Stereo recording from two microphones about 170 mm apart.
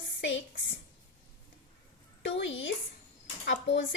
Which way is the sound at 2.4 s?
90° left.